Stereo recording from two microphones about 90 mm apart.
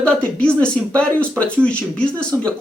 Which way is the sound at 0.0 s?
15° left (ahead or behind).